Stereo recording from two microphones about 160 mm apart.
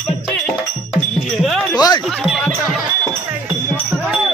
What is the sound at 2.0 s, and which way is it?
Music, centre (ahead or behind).